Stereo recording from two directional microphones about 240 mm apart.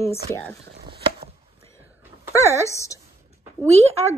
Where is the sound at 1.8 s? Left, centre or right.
Centre.